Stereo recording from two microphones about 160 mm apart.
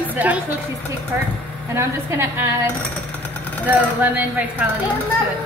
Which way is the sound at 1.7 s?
15° right (ahead or behind).